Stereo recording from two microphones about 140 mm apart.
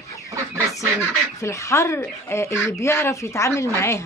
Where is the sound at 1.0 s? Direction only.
20° left (ahead or behind).